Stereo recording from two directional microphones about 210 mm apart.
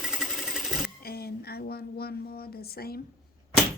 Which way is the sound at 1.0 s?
45° left (ahead or behind).